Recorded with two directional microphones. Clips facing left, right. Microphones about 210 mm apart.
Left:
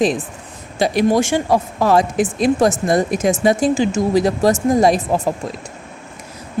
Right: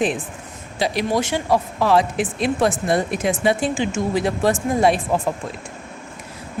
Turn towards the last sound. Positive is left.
turn(degrees=40)  # may be behind; listen again after turning